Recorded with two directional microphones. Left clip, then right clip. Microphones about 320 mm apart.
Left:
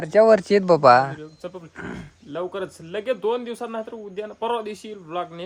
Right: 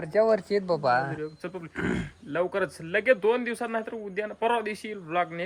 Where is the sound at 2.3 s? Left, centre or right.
Centre.